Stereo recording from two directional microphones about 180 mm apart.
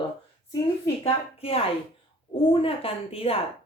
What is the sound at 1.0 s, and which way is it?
A woman's voice, 30° left (ahead or behind).